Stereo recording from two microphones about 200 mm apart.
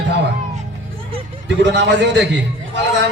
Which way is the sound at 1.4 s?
60° right (ahead or behind).